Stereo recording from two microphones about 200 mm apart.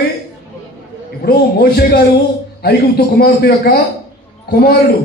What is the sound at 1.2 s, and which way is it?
Speech, 50° left (ahead or behind).